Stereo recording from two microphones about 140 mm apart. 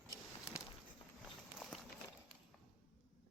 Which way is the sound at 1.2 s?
Centre (ahead or behind).